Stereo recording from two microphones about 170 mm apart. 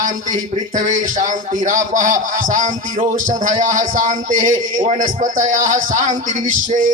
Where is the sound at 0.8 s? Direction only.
50° right (ahead or behind).